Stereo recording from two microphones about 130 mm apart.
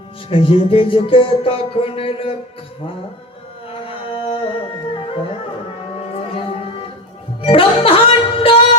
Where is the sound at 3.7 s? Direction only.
45° left (ahead or behind).